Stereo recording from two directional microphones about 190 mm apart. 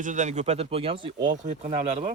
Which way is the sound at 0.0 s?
40° right (ahead or behind).